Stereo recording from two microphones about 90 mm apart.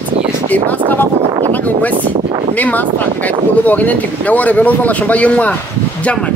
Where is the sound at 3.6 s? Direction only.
20° left (ahead or behind).